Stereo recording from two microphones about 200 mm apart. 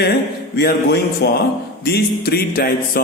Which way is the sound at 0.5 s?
55° left (ahead or behind).